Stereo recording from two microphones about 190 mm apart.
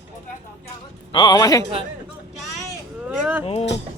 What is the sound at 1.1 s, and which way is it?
Speech, 20° left (ahead or behind).